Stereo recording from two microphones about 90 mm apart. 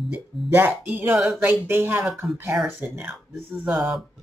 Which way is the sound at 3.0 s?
10° right (ahead or behind).